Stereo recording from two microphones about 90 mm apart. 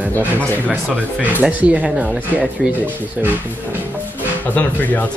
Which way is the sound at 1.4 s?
15° right (ahead or behind).